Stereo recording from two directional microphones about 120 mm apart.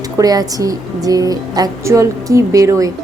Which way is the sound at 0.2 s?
30° right (ahead or behind).